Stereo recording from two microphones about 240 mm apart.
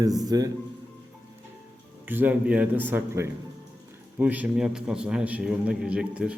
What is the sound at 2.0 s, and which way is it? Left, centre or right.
A man's voice, centre.